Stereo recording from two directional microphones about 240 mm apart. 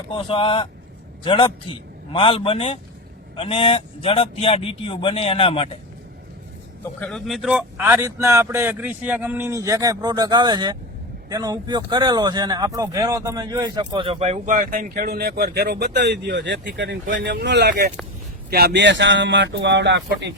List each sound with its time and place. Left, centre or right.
0.1 s speech: left
7.0 s a man's voice: centre; by 20.3 s right